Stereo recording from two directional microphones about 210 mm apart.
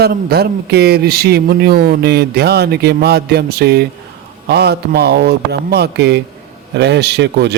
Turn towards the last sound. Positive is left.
turn(degrees=-55)  # may be behind; listen again after turning